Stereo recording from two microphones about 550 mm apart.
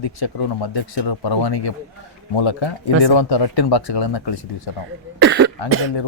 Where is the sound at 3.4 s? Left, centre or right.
Left.